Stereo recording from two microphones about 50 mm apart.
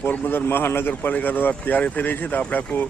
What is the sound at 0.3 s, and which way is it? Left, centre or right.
Speech, left.